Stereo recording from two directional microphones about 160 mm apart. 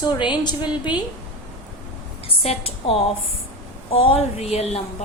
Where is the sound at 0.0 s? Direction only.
30° left (ahead or behind).